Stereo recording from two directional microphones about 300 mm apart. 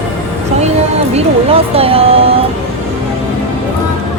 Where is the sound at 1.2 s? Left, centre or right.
Centre.